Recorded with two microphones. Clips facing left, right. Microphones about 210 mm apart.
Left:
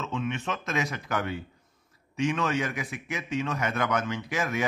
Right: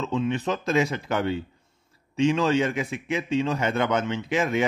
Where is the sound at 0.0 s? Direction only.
35° right (ahead or behind).